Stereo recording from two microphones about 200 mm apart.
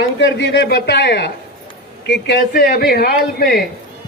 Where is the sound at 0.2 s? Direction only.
60° left (ahead or behind).